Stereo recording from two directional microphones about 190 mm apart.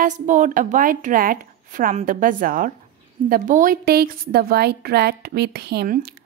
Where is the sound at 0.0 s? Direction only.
40° right (ahead or behind).